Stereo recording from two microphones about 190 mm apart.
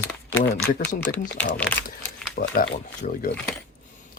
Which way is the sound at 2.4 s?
50° left (ahead or behind).